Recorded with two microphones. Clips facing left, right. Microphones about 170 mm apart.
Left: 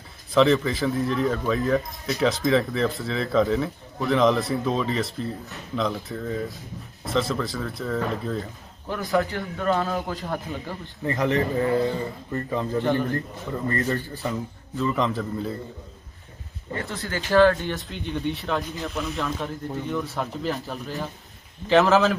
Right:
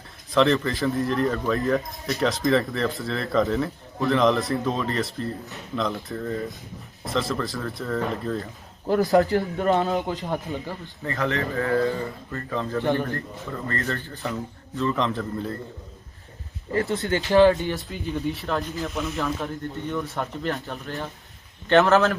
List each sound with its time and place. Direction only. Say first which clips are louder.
0.3 s speech: left 1 dB; centre (ahead or behind)
8.9 s a man's voice: right 6 dB; 40° right (ahead or behind)
9.6 s a man's voice: even; 20° right (ahead or behind)
11.0 s a man's voice: left 3 dB; 20° left (ahead or behind); by 15.5 s centre (ahead or behind)
17.0 s a man's voice: even; 20° right (ahead or behind)
17.8 s speech: even; 5° right (ahead or behind)